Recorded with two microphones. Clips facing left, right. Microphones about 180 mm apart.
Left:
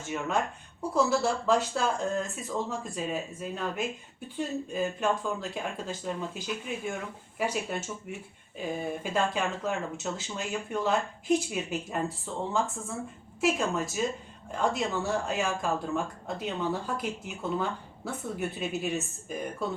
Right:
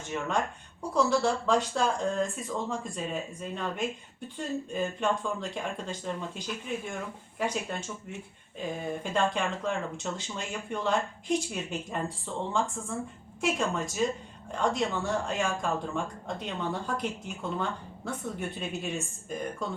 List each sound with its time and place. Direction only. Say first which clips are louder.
0.1 s speech: left 1 dB; 5° left (ahead or behind)